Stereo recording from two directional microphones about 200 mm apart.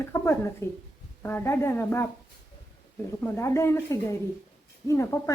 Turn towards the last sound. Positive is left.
turn(degrees=15)  # may be behind; listen again after turning